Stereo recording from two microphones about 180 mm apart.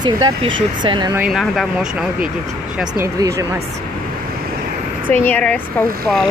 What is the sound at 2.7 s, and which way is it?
Speech, 15° right (ahead or behind).